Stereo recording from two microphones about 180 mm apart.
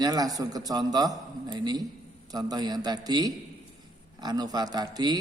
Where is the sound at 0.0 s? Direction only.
20° right (ahead or behind).